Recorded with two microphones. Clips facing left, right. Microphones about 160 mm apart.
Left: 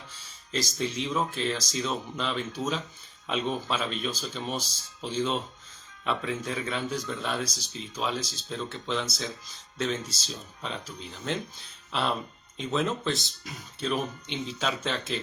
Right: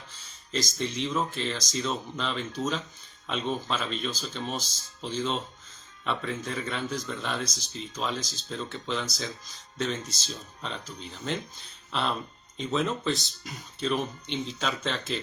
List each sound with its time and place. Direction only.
0.2 s speech: centre (ahead or behind)